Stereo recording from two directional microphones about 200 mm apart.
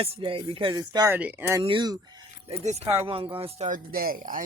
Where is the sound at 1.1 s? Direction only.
10° right (ahead or behind).